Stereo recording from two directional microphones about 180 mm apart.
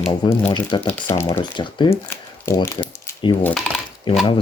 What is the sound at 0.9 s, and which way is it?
Speech, 15° left (ahead or behind).